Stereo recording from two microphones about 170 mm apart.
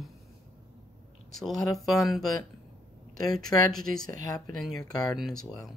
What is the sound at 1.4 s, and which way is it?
Speech, centre (ahead or behind).